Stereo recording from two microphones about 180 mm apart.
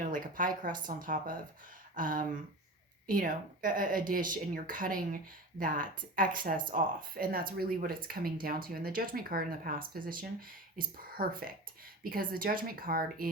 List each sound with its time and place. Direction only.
0.0 s a woman's voice: 50° right (ahead or behind)